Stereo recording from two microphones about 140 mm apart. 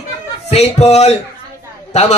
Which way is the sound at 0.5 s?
50° left (ahead or behind).